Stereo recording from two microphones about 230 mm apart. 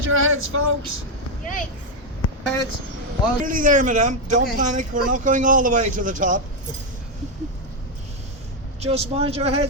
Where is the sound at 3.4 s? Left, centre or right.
Right.